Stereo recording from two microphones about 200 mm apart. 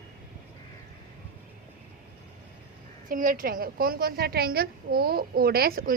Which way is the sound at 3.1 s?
45° right (ahead or behind).